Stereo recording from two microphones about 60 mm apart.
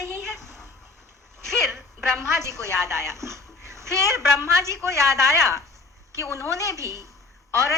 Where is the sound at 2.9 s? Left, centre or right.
Right.